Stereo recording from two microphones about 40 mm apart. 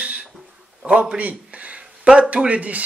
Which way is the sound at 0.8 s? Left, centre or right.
Right.